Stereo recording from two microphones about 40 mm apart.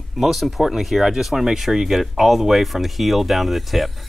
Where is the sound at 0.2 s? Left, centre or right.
Centre.